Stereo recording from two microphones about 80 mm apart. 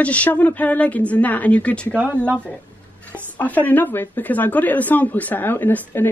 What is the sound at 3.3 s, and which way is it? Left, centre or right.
Speech, left.